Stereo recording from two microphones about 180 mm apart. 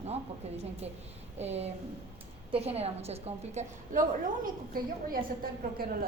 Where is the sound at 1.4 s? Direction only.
35° right (ahead or behind).